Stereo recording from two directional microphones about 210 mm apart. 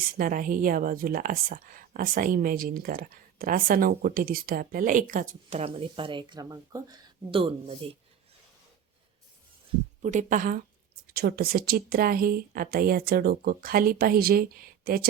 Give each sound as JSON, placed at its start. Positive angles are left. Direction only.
{"t": 0.0, "sound": "a woman's voice", "side_deg": -40}
{"t": 10.0, "sound": "a woman's voice", "side_deg": -35}